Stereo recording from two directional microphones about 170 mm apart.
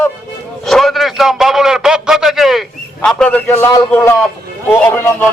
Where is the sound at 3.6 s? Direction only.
20° left (ahead or behind).